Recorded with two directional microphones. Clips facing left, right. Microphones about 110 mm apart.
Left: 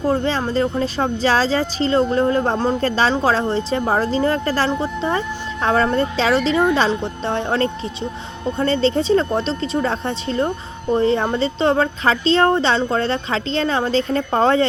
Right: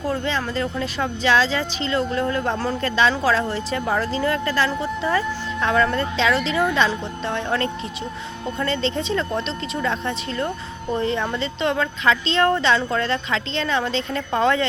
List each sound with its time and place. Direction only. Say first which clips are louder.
0.0 s speech: left 5 dB; 30° left (ahead or behind)